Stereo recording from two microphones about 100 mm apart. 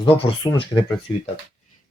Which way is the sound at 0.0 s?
60° left (ahead or behind).